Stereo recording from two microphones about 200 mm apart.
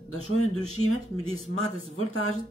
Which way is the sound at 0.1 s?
90° left.